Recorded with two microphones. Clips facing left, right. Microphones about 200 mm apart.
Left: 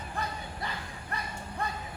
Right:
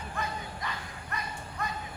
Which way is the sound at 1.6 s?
30° left (ahead or behind).